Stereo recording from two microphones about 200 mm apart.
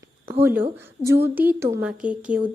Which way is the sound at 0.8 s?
10° right (ahead or behind).